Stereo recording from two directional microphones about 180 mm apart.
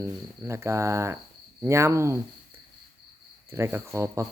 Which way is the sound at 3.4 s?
15° right (ahead or behind).